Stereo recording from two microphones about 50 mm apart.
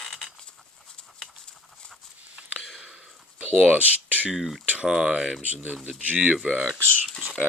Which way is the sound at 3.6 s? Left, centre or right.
Right.